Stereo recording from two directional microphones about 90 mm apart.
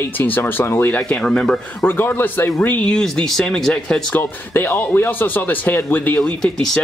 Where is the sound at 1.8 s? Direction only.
25° left (ahead or behind); by 4.0 s 5° left (ahead or behind).